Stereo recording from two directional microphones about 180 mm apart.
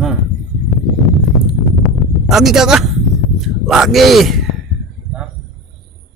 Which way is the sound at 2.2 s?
Centre (ahead or behind).